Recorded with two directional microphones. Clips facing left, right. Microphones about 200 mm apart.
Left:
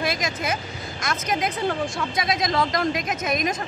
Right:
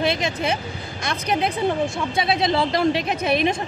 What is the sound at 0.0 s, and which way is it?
A woman's voice, 30° right (ahead or behind).